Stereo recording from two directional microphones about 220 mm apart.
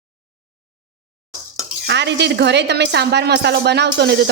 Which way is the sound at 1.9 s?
50° right (ahead or behind).